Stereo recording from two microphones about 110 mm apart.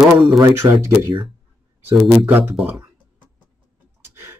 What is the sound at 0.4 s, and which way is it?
Speech, 25° right (ahead or behind).